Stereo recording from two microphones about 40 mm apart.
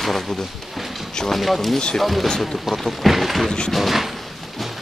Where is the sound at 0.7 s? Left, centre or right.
Centre.